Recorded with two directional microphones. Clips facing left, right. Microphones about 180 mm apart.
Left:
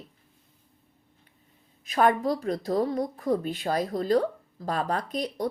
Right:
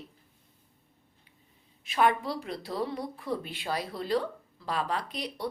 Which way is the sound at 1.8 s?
45° left (ahead or behind).